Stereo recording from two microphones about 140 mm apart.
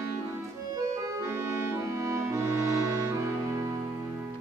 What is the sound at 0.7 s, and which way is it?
Music, 20° right (ahead or behind).